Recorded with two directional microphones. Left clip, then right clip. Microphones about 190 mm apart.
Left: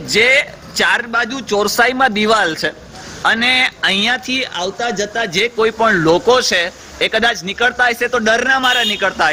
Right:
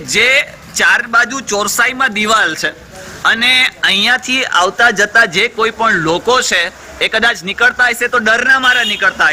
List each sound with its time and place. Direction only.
0.1 s a man's voice: 15° left (ahead or behind)